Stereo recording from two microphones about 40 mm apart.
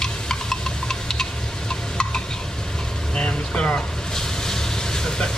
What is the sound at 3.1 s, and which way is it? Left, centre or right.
Vehicle, left.